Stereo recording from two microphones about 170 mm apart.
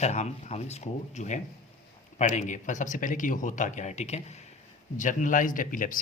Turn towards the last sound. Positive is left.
turn(degrees=55)  # may be behind; listen again after turning